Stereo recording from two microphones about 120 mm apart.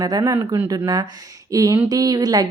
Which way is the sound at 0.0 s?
35° right (ahead or behind).